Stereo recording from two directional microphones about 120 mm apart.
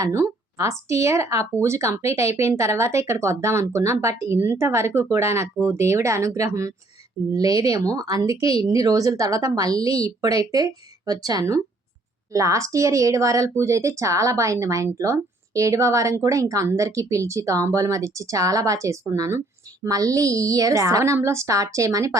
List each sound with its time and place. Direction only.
0.0 s speech: 25° right (ahead or behind)